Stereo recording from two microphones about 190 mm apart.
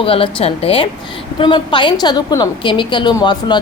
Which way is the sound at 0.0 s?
30° left (ahead or behind).